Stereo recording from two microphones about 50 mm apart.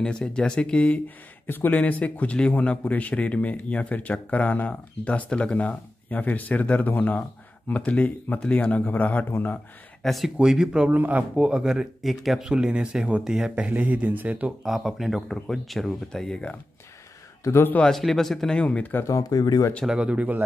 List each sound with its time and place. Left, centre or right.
0.0 s speech: centre; by 9.3 s left
10.0 s speech: centre
10.4 s speech: centre
10.9 s speech: right
11.3 s speech: centre
12.0 s speech: centre
12.4 s speech: centre
13.7 s speech: right
14.6 s speech: centre
17.4 s a man's voice: left
17.8 s speech: centre
18.8 s speech: left
19.9 s speech: right